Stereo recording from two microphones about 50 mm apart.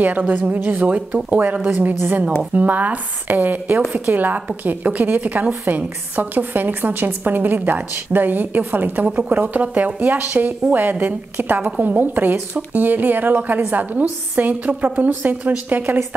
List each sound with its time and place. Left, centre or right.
0.0 s a woman's voice: right